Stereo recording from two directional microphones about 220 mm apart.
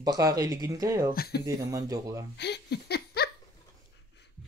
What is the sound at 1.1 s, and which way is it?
Speech, 45° left (ahead or behind).